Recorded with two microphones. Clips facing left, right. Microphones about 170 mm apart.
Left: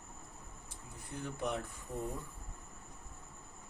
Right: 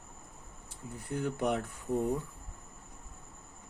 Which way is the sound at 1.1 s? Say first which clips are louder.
Right 7 dB; 70° right (ahead or behind).